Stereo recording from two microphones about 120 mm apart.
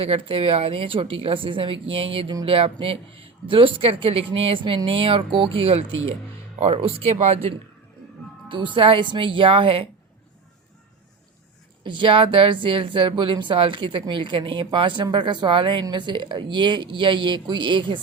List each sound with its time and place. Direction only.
0.0 s speech: 50° right (ahead or behind)
8.4 s speech: 45° right (ahead or behind)
11.8 s a woman's voice: 40° right (ahead or behind)